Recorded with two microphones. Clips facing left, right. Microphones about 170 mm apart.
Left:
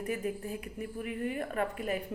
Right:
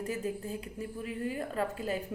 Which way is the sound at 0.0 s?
25° right (ahead or behind).